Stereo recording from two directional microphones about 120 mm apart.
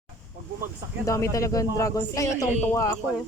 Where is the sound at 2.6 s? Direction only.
15° left (ahead or behind).